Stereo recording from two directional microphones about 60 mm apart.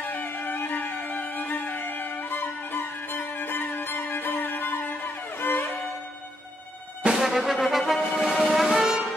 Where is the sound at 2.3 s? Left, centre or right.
Left.